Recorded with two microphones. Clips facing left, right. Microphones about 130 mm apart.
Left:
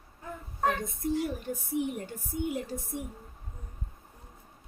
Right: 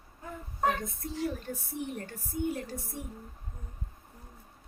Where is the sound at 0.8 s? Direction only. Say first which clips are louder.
Left 4 dB; 15° left (ahead or behind).